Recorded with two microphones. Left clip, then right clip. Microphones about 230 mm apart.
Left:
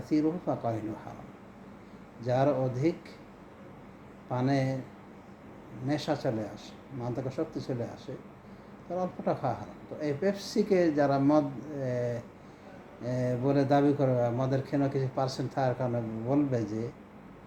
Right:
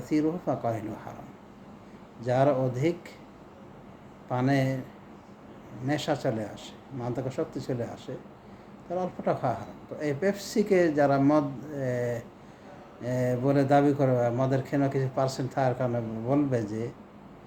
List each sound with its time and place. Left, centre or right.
0.0 s speech: centre
2.2 s speech: centre
4.3 s speech: centre
5.9 s speech: centre